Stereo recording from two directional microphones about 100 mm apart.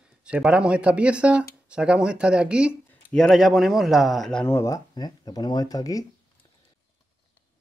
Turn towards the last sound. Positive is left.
turn(degrees=35)  # may be behind; listen again after turning